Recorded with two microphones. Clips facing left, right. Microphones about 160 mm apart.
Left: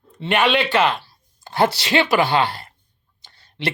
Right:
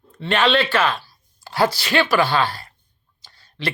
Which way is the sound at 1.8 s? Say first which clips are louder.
Left 1 dB; 20° left (ahead or behind).